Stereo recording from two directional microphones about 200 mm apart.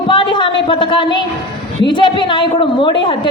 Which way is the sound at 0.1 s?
25° left (ahead or behind).